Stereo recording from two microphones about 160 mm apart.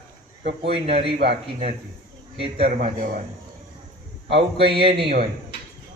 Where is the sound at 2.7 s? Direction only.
55° right (ahead or behind).